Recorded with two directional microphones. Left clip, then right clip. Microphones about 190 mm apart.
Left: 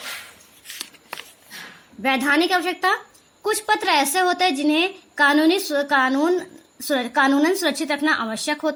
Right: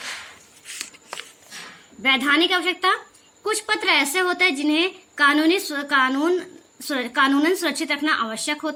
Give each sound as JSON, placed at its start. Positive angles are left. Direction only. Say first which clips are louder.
{"t": 2.1, "sound": "a woman's voice", "louder": "left 1 dB", "side_deg": 45}